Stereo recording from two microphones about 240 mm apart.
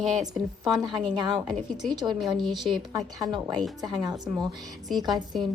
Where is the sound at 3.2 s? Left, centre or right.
Centre.